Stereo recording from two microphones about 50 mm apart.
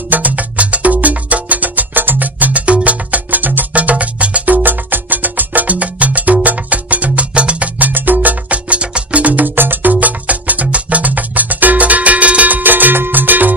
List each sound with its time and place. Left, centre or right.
0.1 s music: right
7.9 s music: right